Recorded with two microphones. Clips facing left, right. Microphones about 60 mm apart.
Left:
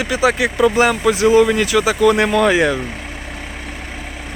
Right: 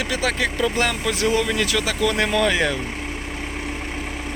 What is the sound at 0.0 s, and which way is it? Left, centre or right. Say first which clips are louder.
Speech: left 6 dB; centre.